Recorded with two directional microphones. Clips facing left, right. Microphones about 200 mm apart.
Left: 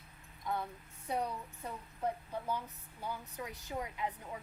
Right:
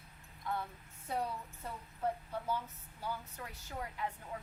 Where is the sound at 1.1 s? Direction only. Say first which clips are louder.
Left 1 dB; 15° left (ahead or behind).